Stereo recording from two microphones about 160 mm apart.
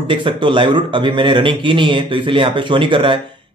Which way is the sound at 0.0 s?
30° right (ahead or behind).